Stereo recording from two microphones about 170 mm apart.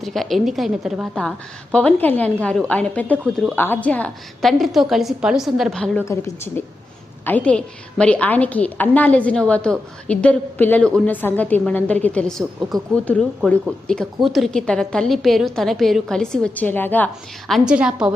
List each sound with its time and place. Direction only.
0.0 s a woman's voice: centre (ahead or behind)
6.1 s a woman's voice: 15° left (ahead or behind)
17.5 s a woman's voice: 5° right (ahead or behind)